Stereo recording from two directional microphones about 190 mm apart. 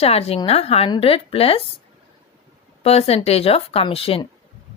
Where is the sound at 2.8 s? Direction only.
30° left (ahead or behind).